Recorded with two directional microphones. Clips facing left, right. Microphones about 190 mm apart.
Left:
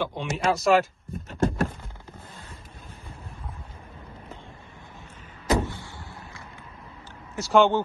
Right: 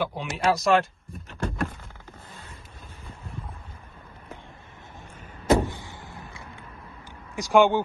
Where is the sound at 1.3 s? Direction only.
35° left (ahead or behind).